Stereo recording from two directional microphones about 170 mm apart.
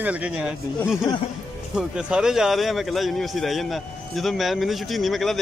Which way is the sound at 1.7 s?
5° right (ahead or behind).